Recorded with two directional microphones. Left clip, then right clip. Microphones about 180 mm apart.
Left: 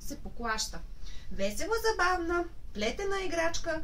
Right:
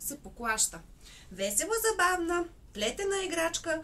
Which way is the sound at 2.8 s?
15° right (ahead or behind).